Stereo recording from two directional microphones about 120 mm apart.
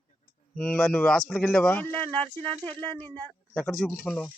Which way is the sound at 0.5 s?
10° left (ahead or behind).